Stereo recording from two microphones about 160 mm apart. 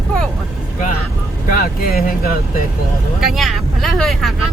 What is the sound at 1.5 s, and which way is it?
Speech, 65° left (ahead or behind).